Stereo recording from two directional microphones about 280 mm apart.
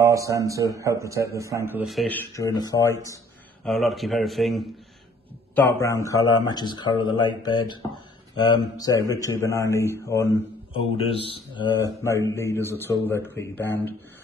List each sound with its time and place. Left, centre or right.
0.0 s a man's voice: centre
3.6 s a man's voice: centre